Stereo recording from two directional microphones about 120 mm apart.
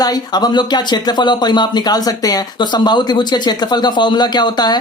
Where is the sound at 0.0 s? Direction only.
35° left (ahead or behind).